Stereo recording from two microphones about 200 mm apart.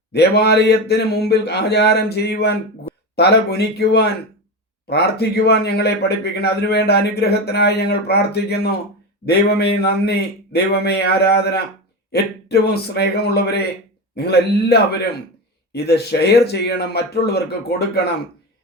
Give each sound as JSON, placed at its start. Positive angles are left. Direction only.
{"t": 0.1, "sound": "speech", "side_deg": 55}